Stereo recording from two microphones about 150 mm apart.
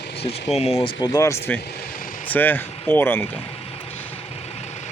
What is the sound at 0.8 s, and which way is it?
Speech, 25° left (ahead or behind).